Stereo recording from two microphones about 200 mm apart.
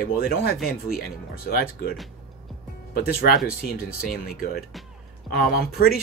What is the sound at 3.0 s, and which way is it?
Speech, 50° left (ahead or behind).